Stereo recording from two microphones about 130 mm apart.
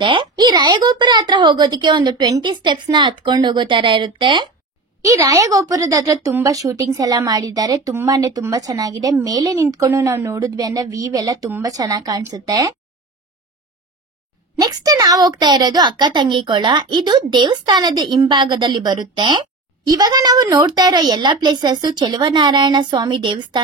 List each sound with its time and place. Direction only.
0.0 s a child's voice: 35° right (ahead or behind)
5.0 s speech: 25° right (ahead or behind)
14.6 s a child's voice: 30° right (ahead or behind)